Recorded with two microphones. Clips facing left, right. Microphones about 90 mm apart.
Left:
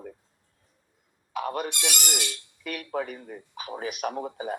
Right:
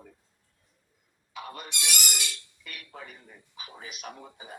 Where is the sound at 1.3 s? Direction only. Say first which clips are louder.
Left 10 dB; 55° left (ahead or behind).